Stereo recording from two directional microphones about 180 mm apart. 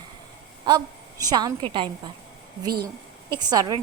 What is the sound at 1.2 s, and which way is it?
Speech, 20° right (ahead or behind).